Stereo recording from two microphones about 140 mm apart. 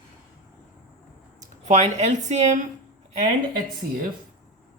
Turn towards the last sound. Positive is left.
turn(degrees=-90)